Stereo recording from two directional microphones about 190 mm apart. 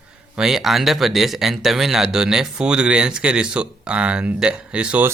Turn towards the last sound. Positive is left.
turn(degrees=-5)  # may be behind; listen again after turning